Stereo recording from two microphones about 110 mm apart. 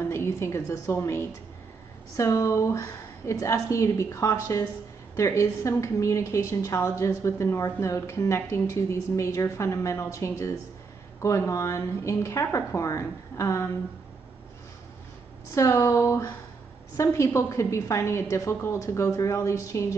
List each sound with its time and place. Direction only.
0.0 s a woman's voice: 25° left (ahead or behind)
15.5 s a woman's voice: 25° left (ahead or behind)